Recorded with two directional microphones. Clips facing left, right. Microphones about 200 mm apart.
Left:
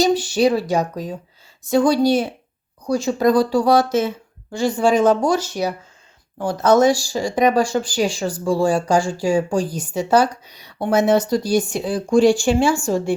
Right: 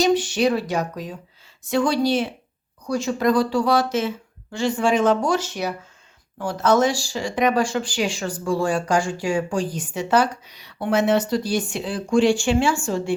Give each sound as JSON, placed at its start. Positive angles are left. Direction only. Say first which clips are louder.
{"t": 0.0, "sound": "speech", "louder": "left 2 dB", "side_deg": 35}